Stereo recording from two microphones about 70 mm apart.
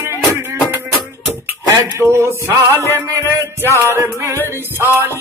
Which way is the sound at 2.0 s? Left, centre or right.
Right.